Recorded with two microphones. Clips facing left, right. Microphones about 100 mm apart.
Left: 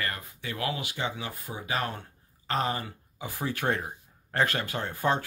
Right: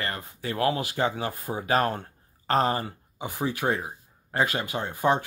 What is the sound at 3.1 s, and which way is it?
Speech, 20° right (ahead or behind).